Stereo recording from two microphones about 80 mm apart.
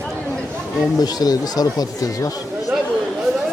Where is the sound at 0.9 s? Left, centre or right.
Left.